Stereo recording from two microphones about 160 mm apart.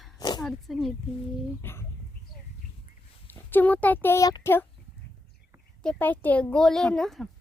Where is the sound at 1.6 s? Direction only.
15° left (ahead or behind).